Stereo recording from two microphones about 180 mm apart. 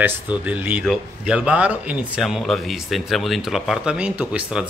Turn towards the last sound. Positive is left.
turn(degrees=-5)  # may be behind; listen again after turning